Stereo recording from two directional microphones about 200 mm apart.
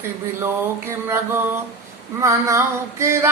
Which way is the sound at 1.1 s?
10° right (ahead or behind).